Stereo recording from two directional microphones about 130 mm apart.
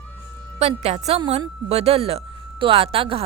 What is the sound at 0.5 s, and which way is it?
A woman's voice, 55° right (ahead or behind).